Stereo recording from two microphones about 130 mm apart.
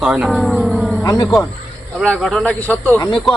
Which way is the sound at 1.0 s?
30° left (ahead or behind).